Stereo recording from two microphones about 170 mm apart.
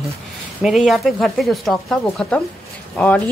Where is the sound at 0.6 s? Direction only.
Centre (ahead or behind).